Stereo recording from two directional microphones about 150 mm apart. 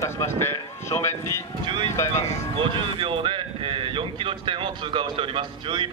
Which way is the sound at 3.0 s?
35° right (ahead or behind).